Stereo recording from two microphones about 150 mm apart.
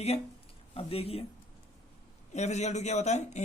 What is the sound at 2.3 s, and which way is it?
Speech, 50° left (ahead or behind).